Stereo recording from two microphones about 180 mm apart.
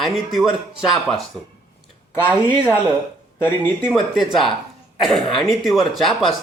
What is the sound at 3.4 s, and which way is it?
Speech, 10° left (ahead or behind).